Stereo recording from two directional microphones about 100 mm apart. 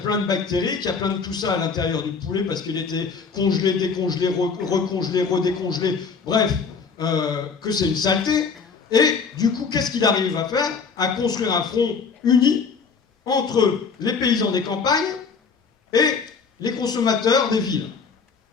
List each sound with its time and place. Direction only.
0.1 s speech: 45° left (ahead or behind)